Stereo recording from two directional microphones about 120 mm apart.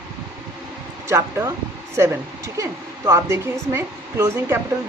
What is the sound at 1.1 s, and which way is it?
Speech, 25° right (ahead or behind).